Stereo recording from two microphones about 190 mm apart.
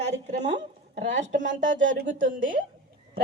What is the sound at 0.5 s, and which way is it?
Speech, 65° right (ahead or behind).